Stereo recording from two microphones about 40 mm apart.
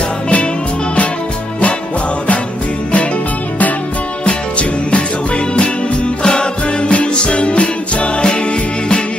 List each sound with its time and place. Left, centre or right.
4.3 s music: left
6.2 s music: left